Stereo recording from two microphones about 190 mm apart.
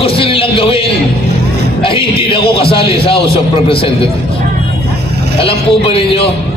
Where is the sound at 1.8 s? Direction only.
30° left (ahead or behind).